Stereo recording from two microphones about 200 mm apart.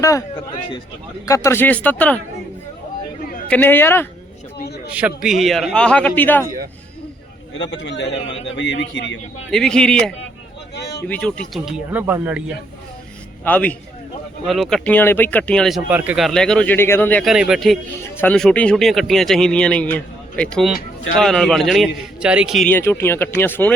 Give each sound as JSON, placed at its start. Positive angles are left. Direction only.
{"t": 0.0, "sound": "a man's voice", "side_deg": 15}
{"t": 3.5, "sound": "speech", "side_deg": 10}
{"t": 4.5, "sound": "a sound", "side_deg": 50}
{"t": 4.9, "sound": "speech", "side_deg": -5}
{"t": 7.6, "sound": "a man's voice", "side_deg": 65}
{"t": 9.5, "sound": "speech", "side_deg": 5}
{"t": 10.8, "sound": "a sound", "side_deg": 55}
{"t": 11.0, "sound": "speech", "side_deg": 10}
{"t": 13.4, "sound": "speech", "side_deg": 10}